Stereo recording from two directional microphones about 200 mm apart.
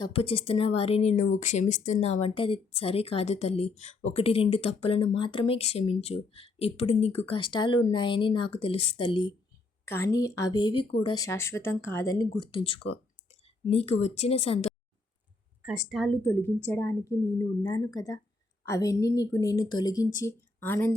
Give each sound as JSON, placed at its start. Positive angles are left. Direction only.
{"t": 0.0, "sound": "a woman's voice", "side_deg": 30}
{"t": 9.8, "sound": "a woman's voice", "side_deg": 10}
{"t": 15.6, "sound": "speech", "side_deg": -5}